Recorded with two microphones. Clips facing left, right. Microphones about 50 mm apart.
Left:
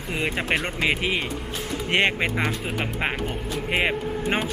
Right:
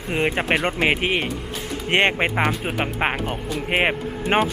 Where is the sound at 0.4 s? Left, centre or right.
Centre.